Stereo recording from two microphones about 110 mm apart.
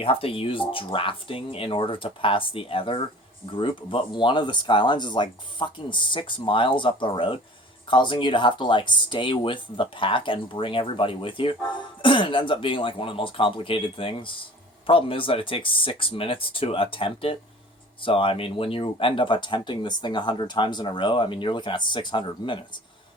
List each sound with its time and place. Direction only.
0.0 s speech: 55° left (ahead or behind)